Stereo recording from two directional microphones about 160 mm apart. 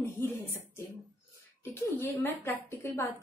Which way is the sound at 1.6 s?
15° left (ahead or behind).